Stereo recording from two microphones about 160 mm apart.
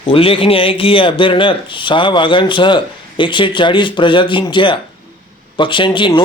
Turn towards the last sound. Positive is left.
turn(degrees=30)  # may be behind; listen again after turning